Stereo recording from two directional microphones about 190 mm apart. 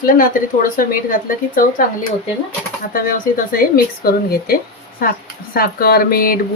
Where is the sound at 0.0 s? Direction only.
45° left (ahead or behind).